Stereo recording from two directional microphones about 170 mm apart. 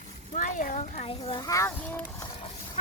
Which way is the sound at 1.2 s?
25° left (ahead or behind).